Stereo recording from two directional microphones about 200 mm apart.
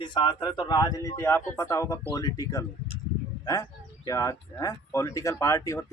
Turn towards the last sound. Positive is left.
turn(degrees=15)  # may be behind; listen again after turning